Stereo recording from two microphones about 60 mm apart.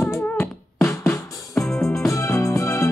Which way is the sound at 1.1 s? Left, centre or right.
Centre.